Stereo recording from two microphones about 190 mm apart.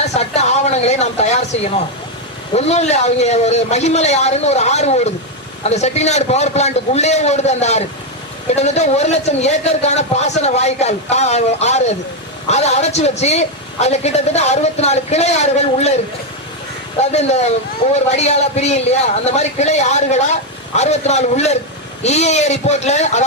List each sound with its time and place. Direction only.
0.0 s a sound: 35° left (ahead or behind)
2.6 s a man's voice: 35° left (ahead or behind)
17.0 s a man's voice: 35° left (ahead or behind)